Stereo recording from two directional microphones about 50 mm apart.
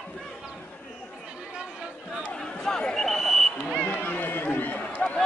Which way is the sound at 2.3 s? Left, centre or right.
Centre.